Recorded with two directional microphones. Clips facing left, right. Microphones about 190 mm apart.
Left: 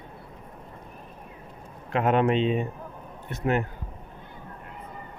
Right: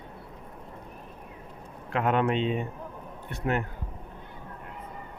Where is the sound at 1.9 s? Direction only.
20° left (ahead or behind).